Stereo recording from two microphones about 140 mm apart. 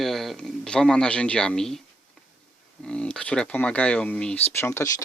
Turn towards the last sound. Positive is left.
turn(degrees=20)  # may be behind; listen again after turning